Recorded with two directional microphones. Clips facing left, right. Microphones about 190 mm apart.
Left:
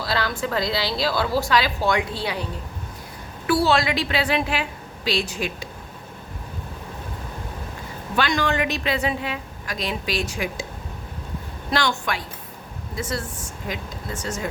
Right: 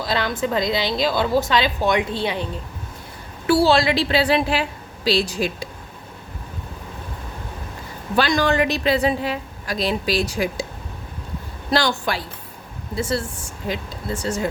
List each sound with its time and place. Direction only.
0.0 s a woman's voice: 20° right (ahead or behind); by 5.6 s 35° right (ahead or behind)
8.1 s a woman's voice: 35° right (ahead or behind)
11.7 s a woman's voice: 35° right (ahead or behind)